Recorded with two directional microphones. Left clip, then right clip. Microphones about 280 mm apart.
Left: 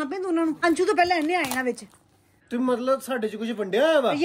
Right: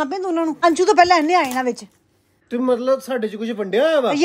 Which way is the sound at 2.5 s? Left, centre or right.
Centre.